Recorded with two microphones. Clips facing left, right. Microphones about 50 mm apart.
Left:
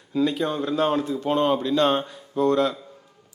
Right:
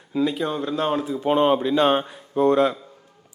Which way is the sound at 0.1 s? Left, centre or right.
Centre.